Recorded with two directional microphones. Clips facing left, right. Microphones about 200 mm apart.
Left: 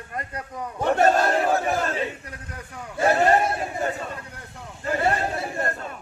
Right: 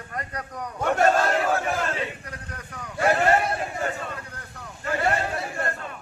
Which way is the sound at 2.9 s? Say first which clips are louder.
Left 2 dB; 30° left (ahead or behind).